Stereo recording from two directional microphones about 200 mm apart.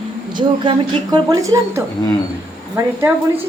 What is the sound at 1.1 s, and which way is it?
Speech, 20° right (ahead or behind).